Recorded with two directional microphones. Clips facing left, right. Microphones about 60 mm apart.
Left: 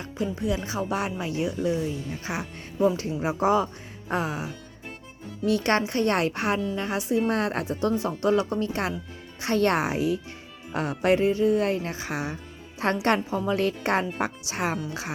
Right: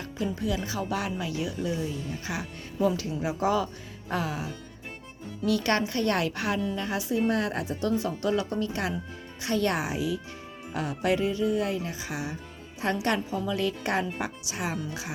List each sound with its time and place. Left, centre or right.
0.0 s speech: left
5.5 s speech: left